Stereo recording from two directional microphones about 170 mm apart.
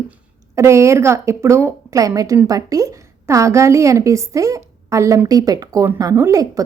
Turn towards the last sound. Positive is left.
turn(degrees=-20)  # may be behind; listen again after turning